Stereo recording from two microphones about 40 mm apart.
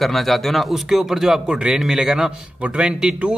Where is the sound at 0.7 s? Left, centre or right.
Centre.